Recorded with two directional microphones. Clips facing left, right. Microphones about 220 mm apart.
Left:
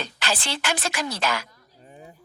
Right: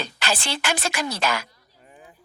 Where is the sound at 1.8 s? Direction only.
35° left (ahead or behind).